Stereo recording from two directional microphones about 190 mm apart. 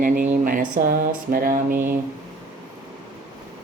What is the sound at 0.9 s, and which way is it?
Speech, 50° right (ahead or behind).